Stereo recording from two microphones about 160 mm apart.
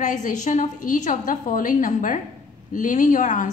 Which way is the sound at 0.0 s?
50° left (ahead or behind).